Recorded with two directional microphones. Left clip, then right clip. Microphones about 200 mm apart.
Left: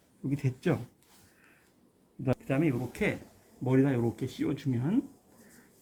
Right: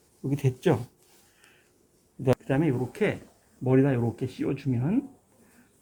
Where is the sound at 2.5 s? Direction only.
40° right (ahead or behind).